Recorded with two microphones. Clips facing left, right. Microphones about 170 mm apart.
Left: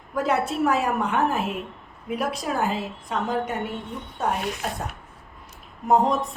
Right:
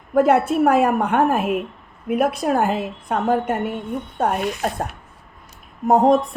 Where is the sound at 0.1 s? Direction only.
55° right (ahead or behind).